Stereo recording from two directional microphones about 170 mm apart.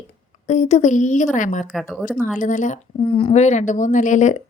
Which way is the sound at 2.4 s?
45° left (ahead or behind).